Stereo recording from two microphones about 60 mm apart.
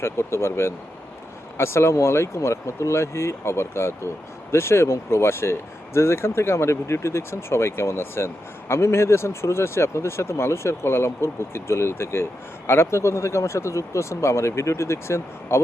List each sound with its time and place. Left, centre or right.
0.0 s speech: left